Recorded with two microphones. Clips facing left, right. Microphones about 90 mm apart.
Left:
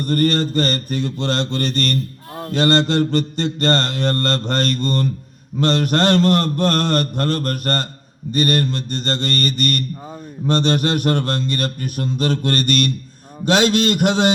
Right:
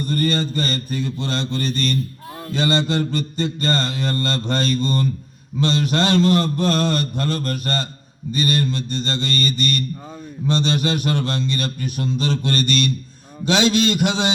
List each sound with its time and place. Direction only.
0.0 s mantra: 60° left (ahead or behind)
10.4 s speech: 55° left (ahead or behind)